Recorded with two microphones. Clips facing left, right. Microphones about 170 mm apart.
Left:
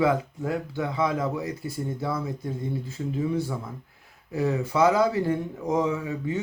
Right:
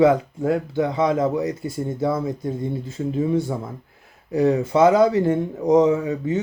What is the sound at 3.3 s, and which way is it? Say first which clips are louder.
Speech: right 6 dB; 25° right (ahead or behind).